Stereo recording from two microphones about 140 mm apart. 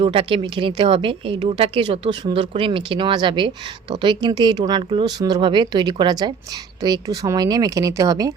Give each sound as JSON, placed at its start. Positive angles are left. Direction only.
{"t": 0.0, "sound": "a woman's voice", "side_deg": -40}